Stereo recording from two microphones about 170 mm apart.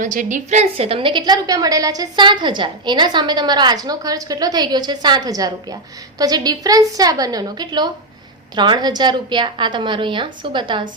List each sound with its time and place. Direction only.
0.0 s a woman's voice: 50° right (ahead or behind); by 10.8 s 30° right (ahead or behind)